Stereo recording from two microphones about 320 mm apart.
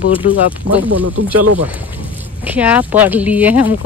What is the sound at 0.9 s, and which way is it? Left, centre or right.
Speech, right.